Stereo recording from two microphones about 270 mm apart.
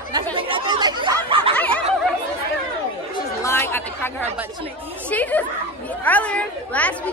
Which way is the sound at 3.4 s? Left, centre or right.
Centre.